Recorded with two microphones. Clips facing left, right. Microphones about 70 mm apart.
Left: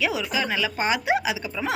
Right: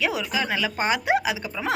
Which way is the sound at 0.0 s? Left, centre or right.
Right.